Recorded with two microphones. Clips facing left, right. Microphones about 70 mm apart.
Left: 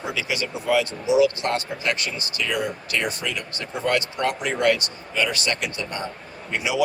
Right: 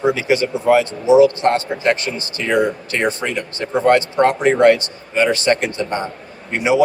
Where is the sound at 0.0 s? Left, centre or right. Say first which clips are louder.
Right 11 dB; right.